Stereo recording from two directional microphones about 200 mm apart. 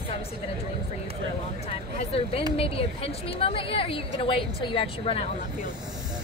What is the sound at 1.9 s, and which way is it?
A woman's voice, 30° left (ahead or behind).